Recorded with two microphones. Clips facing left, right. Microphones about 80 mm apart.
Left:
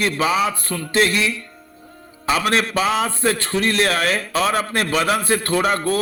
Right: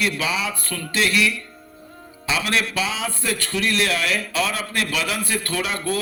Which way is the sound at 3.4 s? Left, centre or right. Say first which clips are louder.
Left 3 dB; left.